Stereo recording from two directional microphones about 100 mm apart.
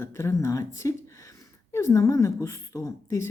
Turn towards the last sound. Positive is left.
turn(degrees=25)  # may be behind; listen again after turning